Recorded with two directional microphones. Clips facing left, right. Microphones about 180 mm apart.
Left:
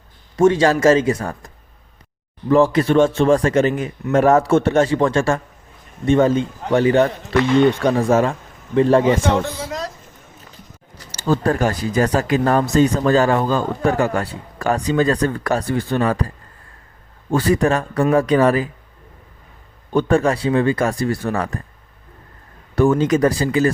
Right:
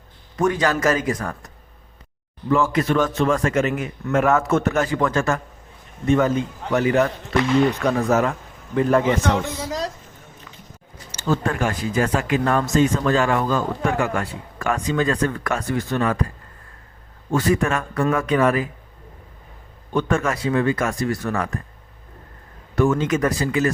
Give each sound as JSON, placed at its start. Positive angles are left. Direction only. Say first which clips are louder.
{"t": 0.3, "sound": "a man's voice", "louder": "left 6 dB", "side_deg": 25}
{"t": 2.5, "sound": "a man's voice", "louder": "left 5 dB", "side_deg": 35}
{"t": 11.1, "sound": "speech", "louder": "left 4 dB", "side_deg": 35}
{"t": 17.3, "sound": "speech", "louder": "left 3 dB", "side_deg": 35}
{"t": 19.9, "sound": "speech", "louder": "left 5 dB", "side_deg": 35}
{"t": 22.7, "sound": "speech", "louder": "left 4 dB", "side_deg": 35}